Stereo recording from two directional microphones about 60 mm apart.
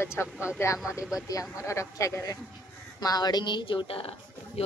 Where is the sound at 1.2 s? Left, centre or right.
Left.